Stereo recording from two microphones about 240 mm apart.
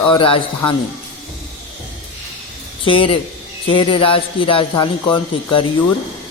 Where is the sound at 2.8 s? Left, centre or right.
Left.